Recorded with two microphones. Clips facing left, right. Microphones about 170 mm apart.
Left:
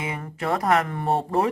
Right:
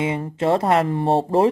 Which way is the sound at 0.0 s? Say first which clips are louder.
Right 8 dB; 25° right (ahead or behind).